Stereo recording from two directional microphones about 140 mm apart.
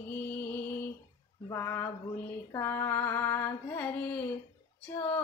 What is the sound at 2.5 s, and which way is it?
Music, 15° left (ahead or behind).